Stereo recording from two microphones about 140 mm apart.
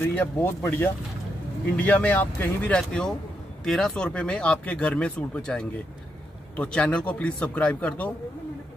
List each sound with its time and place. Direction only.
0.1 s speech: 15° left (ahead or behind)